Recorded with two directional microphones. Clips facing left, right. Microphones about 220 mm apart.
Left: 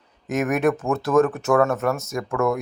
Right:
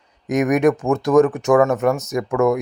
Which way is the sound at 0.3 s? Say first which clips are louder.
Right 5 dB; 15° right (ahead or behind).